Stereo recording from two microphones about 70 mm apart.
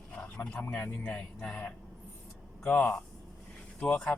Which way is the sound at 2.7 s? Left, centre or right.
Left.